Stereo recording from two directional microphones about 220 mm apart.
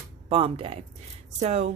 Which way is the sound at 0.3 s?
25° right (ahead or behind).